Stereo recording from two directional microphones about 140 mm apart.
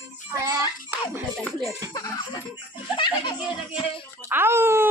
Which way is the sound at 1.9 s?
25° left (ahead or behind).